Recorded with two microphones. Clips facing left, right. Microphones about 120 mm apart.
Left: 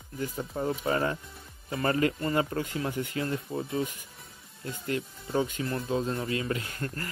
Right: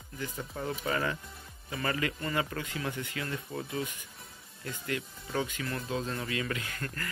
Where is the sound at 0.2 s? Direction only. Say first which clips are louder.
Left 5 dB; 25° left (ahead or behind).